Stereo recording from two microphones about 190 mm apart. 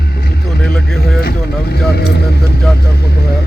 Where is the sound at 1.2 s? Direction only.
55° left (ahead or behind).